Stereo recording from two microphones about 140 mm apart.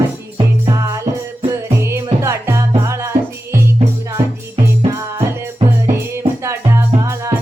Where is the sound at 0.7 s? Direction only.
25° right (ahead or behind).